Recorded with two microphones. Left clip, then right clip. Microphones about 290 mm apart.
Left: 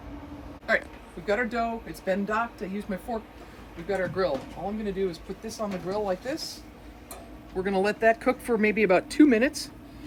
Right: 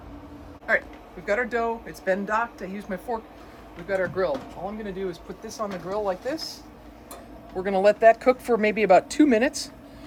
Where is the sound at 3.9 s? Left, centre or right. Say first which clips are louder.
Right 2 dB; centre.